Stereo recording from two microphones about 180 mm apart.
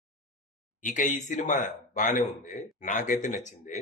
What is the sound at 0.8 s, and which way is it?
Speech, 45° left (ahead or behind).